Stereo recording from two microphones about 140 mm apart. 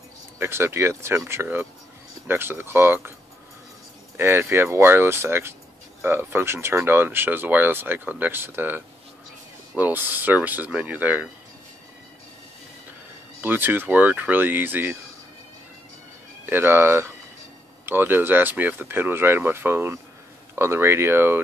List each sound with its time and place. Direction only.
0.4 s speech: 15° right (ahead or behind)
4.2 s speech: 15° right (ahead or behind)
13.4 s speech: 15° right (ahead or behind)
16.4 s speech: 15° right (ahead or behind)